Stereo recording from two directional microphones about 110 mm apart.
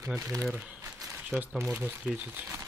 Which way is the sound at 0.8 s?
25° right (ahead or behind).